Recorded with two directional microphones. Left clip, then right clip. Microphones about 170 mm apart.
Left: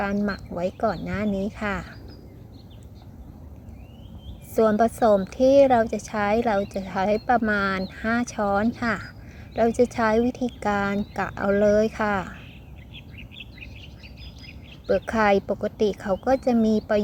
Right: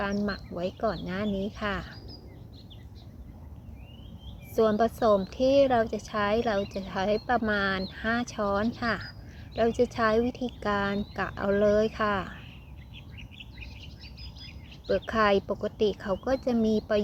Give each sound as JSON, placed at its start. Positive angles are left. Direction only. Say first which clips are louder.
{"t": 0.0, "sound": "a woman's voice", "louder": "left 4 dB", "side_deg": 10}
{"t": 4.5, "sound": "a woman's voice", "louder": "left 4 dB", "side_deg": 15}
{"t": 13.1, "sound": "bird", "louder": "left 4 dB", "side_deg": -60}
{"t": 14.8, "sound": "a woman's voice", "louder": "left 4 dB", "side_deg": 15}